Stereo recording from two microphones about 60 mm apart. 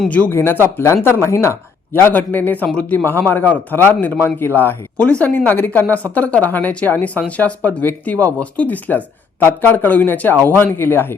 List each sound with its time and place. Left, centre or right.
0.3 s a man's voice: left
1.9 s a man's voice: left